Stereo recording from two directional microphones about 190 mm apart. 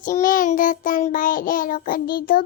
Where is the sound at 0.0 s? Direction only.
45° left (ahead or behind).